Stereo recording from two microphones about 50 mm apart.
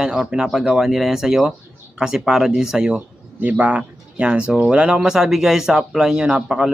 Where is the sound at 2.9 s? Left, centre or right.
Right.